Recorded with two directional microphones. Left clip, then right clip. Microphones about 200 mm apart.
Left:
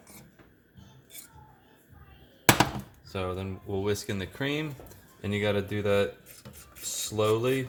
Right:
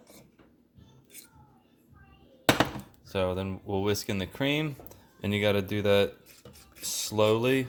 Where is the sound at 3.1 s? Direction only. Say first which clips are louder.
Right 4 dB; 40° right (ahead or behind).